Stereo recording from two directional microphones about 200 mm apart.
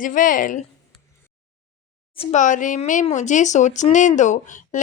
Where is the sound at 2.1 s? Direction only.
30° left (ahead or behind).